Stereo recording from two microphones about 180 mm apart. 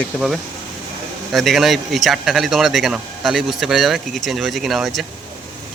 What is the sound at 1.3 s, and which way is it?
Speech, centre (ahead or behind).